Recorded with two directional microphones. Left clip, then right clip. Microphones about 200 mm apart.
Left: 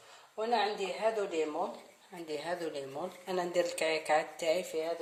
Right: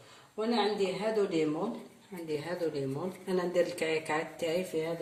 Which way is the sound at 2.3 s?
30° left (ahead or behind).